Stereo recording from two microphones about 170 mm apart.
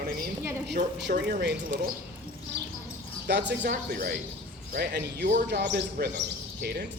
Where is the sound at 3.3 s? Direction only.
90° right.